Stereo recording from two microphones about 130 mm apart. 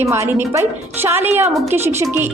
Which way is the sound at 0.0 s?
20° right (ahead or behind).